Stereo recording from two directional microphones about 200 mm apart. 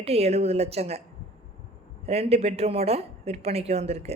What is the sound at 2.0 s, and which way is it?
Speech, 30° right (ahead or behind).